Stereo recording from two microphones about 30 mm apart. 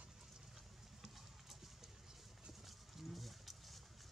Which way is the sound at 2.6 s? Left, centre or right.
Centre.